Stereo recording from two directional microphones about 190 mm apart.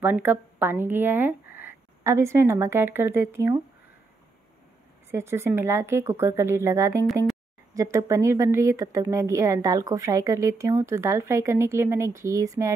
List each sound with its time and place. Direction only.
0.0 s speech: 10° right (ahead or behind)
5.1 s a woman's voice: 15° right (ahead or behind)